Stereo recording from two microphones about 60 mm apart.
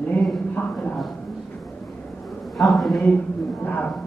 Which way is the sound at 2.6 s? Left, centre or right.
Centre.